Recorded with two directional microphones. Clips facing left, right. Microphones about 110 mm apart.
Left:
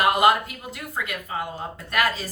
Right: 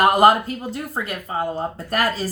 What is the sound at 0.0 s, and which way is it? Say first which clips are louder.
Speech: right 4 dB; 40° right (ahead or behind).